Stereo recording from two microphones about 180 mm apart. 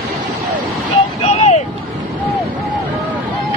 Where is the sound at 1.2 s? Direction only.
35° left (ahead or behind).